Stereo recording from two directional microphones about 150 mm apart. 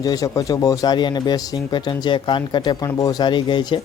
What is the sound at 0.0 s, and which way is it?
Speech, 25° left (ahead or behind).